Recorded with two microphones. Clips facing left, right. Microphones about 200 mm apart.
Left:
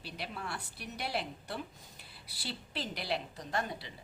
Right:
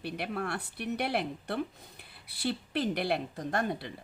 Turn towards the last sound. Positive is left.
turn(degrees=-55)  # may be behind; listen again after turning